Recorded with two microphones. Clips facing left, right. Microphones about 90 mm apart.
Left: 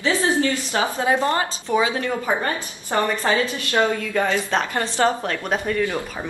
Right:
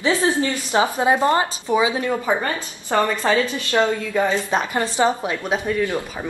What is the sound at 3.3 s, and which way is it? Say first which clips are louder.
Speech: right 2 dB; 20° left (ahead or behind).